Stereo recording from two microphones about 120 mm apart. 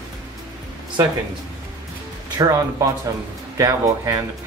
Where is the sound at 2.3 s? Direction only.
30° right (ahead or behind).